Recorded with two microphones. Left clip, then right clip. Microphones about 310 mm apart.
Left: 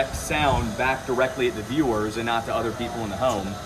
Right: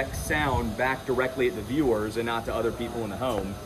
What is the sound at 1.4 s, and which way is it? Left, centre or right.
Speech, centre.